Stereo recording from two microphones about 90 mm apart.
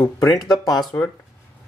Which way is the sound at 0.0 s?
35° left (ahead or behind).